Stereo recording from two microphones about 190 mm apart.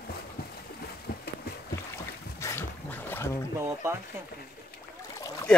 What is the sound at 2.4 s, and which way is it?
Dog, 15° left (ahead or behind).